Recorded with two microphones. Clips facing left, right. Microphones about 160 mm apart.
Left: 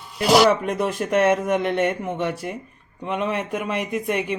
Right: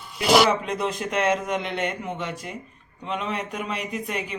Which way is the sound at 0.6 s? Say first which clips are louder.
Left 4 dB; 55° left (ahead or behind).